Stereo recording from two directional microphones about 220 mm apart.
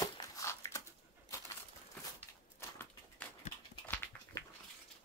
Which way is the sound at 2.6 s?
10° left (ahead or behind).